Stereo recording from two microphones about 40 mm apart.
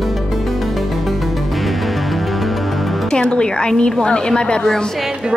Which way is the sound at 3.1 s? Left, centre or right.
Left.